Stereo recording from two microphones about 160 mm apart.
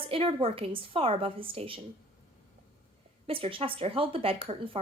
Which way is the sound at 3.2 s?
35° right (ahead or behind).